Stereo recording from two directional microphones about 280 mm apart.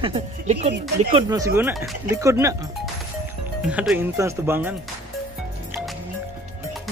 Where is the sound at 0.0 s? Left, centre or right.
Right.